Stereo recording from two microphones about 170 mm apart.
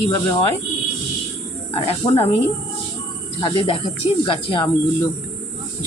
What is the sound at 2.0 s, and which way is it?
Speech, 30° left (ahead or behind).